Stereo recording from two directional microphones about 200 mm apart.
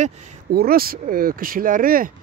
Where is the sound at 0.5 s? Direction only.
50° right (ahead or behind).